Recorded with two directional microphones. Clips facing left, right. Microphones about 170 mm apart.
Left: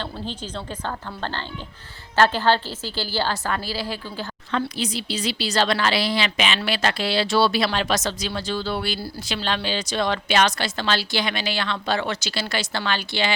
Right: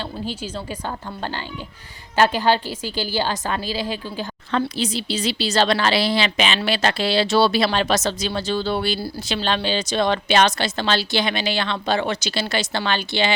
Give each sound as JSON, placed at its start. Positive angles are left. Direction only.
{"t": 0.0, "sound": "a woman's voice", "side_deg": -10}